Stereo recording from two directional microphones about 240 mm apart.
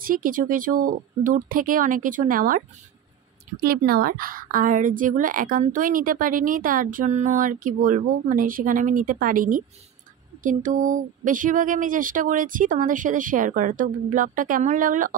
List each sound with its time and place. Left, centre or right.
0.0 s a woman's voice: right
3.6 s a woman's voice: right